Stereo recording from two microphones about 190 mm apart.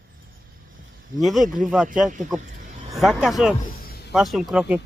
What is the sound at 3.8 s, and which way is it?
Music, 55° left (ahead or behind).